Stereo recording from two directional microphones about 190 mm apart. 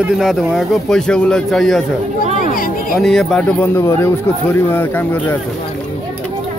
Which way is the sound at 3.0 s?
Centre (ahead or behind).